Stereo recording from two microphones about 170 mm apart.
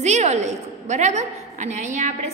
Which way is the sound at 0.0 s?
40° right (ahead or behind).